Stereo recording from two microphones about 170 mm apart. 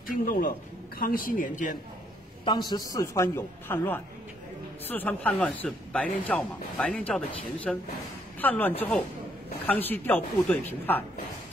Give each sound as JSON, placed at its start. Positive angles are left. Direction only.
{"t": 0.2, "sound": "a man's voice", "side_deg": 55}
{"t": 2.4, "sound": "a man's voice", "side_deg": 25}